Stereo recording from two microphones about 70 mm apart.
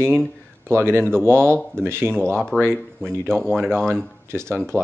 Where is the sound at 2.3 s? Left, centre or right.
Centre.